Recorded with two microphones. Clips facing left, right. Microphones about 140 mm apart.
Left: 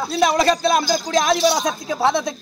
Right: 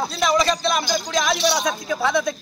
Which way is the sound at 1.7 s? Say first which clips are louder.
Left 3 dB; 30° left (ahead or behind).